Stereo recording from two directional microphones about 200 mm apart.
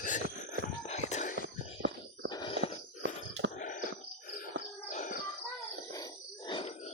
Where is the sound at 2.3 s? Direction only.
20° left (ahead or behind).